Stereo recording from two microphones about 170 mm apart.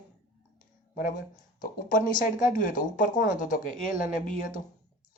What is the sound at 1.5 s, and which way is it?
Speech, 50° left (ahead or behind).